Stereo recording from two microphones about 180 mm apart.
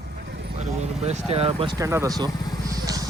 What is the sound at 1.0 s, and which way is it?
Speech, 35° right (ahead or behind).